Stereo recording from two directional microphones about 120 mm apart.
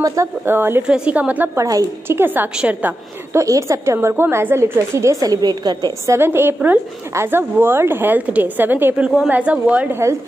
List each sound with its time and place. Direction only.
0.0 s a woman's voice: 25° right (ahead or behind)
1.6 s a woman's voice: 25° right (ahead or behind)
3.3 s a woman's voice: 25° right (ahead or behind)
6.1 s speech: 20° right (ahead or behind)